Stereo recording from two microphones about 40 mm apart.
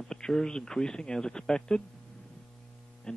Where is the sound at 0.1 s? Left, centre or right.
Centre.